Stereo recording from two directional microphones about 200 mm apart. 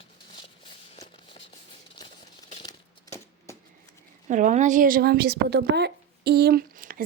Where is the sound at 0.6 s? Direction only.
25° left (ahead or behind).